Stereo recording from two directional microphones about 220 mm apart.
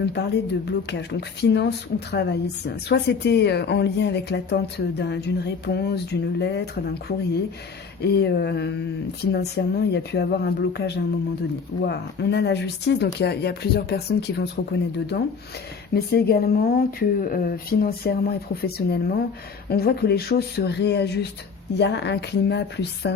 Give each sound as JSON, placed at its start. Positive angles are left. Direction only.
{"t": 0.0, "sound": "a woman's voice", "side_deg": 50}
{"t": 8.0, "sound": "a woman's voice", "side_deg": 50}